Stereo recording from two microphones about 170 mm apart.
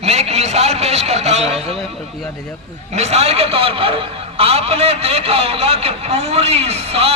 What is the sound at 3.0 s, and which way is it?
A man's voice, 40° right (ahead or behind).